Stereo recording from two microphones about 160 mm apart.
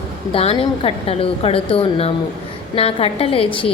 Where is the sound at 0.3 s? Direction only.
35° left (ahead or behind).